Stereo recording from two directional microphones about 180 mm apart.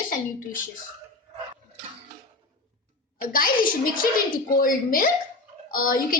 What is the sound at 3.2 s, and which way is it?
A woman's voice, 50° left (ahead or behind).